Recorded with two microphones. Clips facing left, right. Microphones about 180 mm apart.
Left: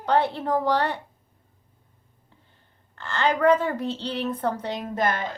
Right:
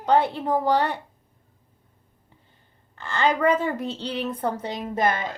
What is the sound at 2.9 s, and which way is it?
Speech, 15° right (ahead or behind).